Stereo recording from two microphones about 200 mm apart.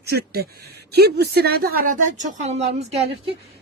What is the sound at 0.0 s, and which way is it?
A woman's voice, 50° right (ahead or behind).